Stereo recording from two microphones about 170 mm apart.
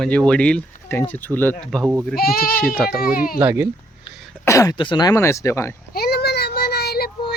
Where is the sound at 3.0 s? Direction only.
60° left (ahead or behind).